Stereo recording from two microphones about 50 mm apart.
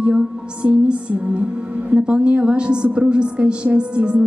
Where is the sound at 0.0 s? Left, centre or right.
Right.